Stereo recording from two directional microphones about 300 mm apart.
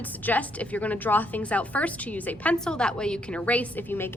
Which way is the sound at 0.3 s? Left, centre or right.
Centre.